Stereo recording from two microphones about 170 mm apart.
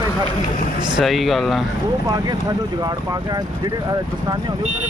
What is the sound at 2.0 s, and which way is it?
Speech, 20° right (ahead or behind).